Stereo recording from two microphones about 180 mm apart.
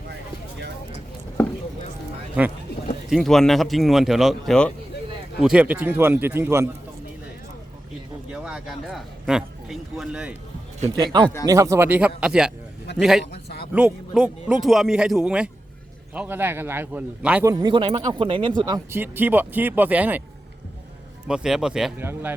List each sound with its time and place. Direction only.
3.1 s a man's voice: centre (ahead or behind)
8.3 s speech: 5° right (ahead or behind)
10.9 s a man's voice: 25° right (ahead or behind); by 13.2 s 5° right (ahead or behind)
13.3 s a sound: 65° left (ahead or behind)
13.7 s a man's voice: 5° right (ahead or behind)
17.5 s speech: 25° right (ahead or behind)
18.9 s speech: 10° right (ahead or behind)
21.2 s a man's voice: 5° right (ahead or behind)